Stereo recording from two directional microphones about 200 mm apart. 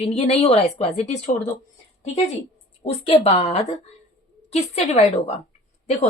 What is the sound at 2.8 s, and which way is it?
Speech, 30° left (ahead or behind).